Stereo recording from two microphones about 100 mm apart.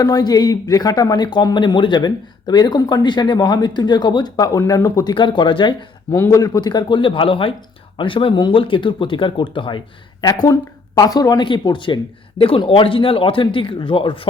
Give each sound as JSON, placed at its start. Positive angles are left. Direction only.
{"t": 0.0, "sound": "speech", "side_deg": 40}
{"t": 5.1, "sound": "speech", "side_deg": 55}
{"t": 6.1, "sound": "speech", "side_deg": 35}
{"t": 11.4, "sound": "speech", "side_deg": 50}